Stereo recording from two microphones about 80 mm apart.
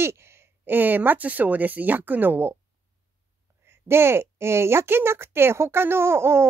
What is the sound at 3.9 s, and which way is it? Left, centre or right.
A woman's voice, right.